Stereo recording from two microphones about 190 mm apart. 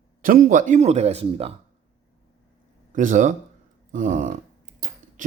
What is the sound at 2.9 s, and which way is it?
Speech, 40° right (ahead or behind).